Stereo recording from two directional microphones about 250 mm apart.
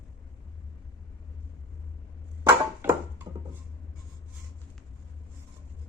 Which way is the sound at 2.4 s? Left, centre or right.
Centre.